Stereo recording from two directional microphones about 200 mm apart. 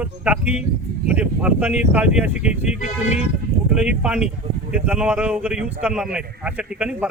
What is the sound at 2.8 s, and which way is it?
Speech, 35° left (ahead or behind).